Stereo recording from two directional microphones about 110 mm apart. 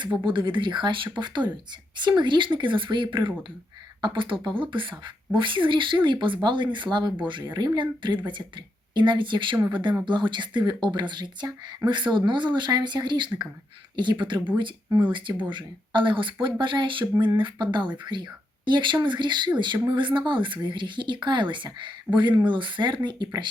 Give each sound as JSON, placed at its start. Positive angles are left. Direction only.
{"t": 0.3, "sound": "speech", "side_deg": -50}
{"t": 15.4, "sound": "speech", "side_deg": -45}